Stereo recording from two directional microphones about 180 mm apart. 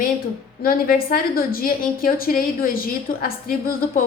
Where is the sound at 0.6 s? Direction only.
55° left (ahead or behind).